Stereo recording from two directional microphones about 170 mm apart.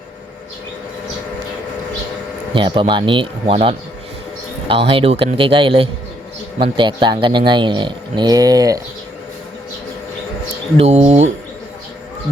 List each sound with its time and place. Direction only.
2.5 s a man's voice: 30° right (ahead or behind)
10.8 s a man's voice: 40° right (ahead or behind)